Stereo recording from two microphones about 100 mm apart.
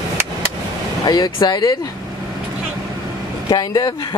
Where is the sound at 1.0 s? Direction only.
45° left (ahead or behind).